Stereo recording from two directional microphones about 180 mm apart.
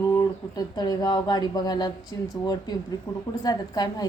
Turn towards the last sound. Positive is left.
turn(degrees=20)  # may be behind; listen again after turning